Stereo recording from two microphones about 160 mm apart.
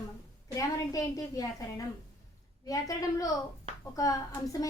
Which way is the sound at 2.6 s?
20° left (ahead or behind).